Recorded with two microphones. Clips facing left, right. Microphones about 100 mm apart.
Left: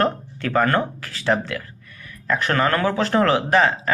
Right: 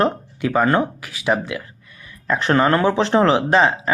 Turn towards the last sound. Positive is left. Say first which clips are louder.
# right 2 dB
turn(degrees=-20)  # may be behind; listen again after turning